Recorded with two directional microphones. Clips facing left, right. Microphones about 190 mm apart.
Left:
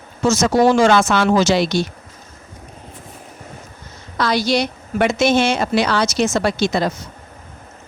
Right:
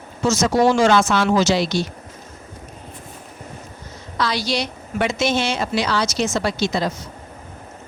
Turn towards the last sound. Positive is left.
turn(degrees=55)  # may be behind; listen again after turning